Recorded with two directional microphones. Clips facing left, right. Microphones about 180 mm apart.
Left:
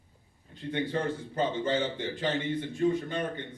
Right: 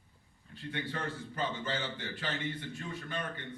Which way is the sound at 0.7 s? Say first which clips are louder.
Left 8 dB; 25° left (ahead or behind).